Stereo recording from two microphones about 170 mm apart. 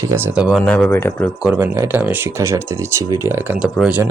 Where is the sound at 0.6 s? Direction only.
5° left (ahead or behind).